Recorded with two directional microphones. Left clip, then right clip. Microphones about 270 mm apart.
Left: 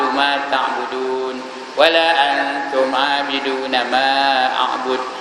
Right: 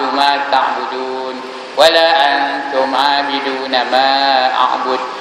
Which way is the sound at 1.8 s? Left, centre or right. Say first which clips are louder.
Right 4 dB; centre.